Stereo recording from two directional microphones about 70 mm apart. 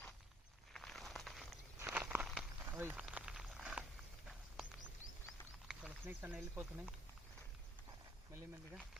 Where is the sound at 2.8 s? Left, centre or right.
Right.